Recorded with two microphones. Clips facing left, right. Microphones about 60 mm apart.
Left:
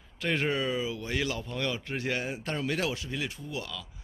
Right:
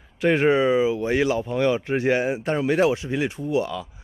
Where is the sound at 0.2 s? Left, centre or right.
Right.